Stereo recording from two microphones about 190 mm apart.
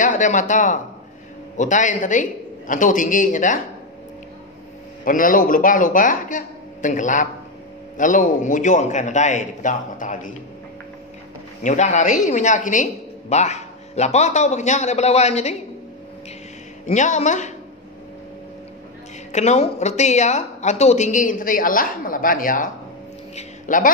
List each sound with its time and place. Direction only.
0.0 s a woman's voice: 40° left (ahead or behind)
5.0 s a man's voice: 45° left (ahead or behind)
11.6 s a woman's voice: 40° left (ahead or behind)
16.8 s a woman's voice: 40° left (ahead or behind)
19.3 s a woman's voice: 35° left (ahead or behind)
23.3 s a sound: 45° left (ahead or behind)